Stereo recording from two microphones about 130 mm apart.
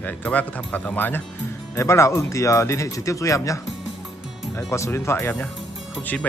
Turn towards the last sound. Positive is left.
turn(degrees=10)  # may be behind; listen again after turning